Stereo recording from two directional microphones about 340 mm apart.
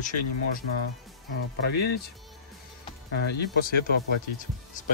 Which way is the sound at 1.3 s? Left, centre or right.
Left.